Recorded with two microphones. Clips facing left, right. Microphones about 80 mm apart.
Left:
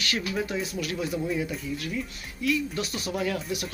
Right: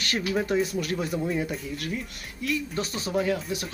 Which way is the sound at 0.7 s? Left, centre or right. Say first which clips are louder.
Right 2 dB; right.